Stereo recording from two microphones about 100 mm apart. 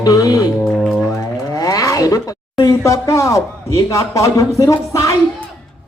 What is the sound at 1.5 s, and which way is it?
A man's voice, 35° left (ahead or behind).